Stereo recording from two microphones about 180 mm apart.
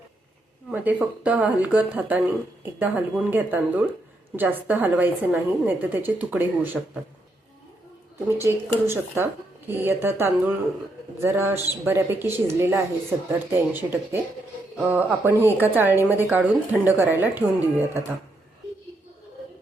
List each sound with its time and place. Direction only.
0.7 s speech: 5° right (ahead or behind)
8.4 s speech: 15° right (ahead or behind)